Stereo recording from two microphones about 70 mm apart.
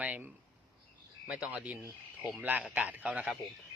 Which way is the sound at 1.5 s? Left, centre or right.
Right.